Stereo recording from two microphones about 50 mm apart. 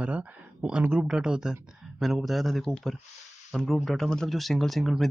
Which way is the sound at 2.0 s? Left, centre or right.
Centre.